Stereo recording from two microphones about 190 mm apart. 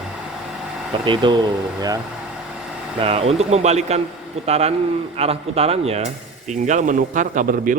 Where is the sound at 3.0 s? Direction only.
30° right (ahead or behind).